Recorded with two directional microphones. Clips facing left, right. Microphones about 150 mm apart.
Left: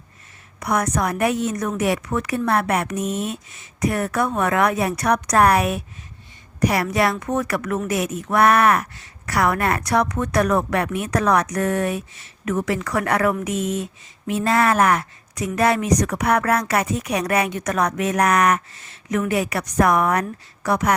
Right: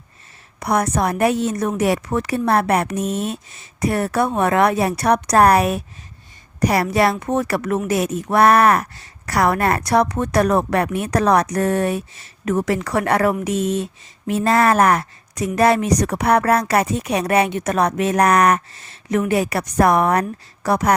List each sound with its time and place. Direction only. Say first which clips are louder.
0.6 s speech: right 3 dB; 30° right (ahead or behind)